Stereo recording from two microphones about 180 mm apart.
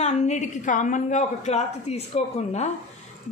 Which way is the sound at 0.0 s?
40° left (ahead or behind).